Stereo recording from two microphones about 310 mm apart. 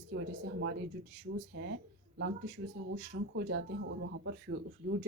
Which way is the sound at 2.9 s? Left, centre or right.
Right.